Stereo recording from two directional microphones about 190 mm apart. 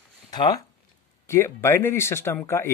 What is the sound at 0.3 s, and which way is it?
Speech, 20° left (ahead or behind).